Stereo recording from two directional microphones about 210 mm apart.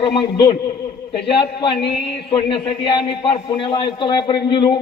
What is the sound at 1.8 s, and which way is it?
Speech, 50° left (ahead or behind).